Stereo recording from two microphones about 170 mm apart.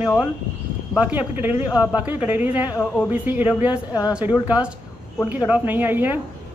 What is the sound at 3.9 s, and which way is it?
Speech, 25° left (ahead or behind).